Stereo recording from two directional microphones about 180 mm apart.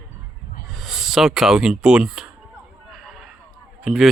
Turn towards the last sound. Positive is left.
turn(degrees=0)  # may be behind; listen again after turning